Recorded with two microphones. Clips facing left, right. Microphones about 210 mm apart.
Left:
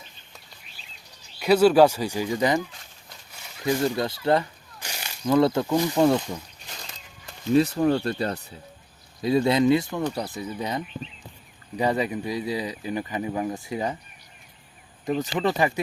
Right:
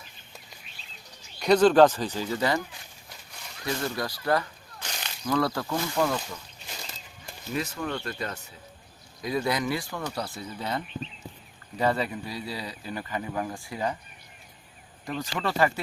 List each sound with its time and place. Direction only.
1.4 s speech: 5° left (ahead or behind)
3.6 s speech: 15° left (ahead or behind)
4.8 s a sound: 10° left (ahead or behind)
5.2 s speech: 25° left (ahead or behind)
7.5 s speech: 35° left (ahead or behind)
15.0 s speech: 20° left (ahead or behind)